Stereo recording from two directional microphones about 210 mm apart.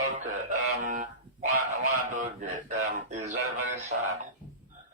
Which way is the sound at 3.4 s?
90° right.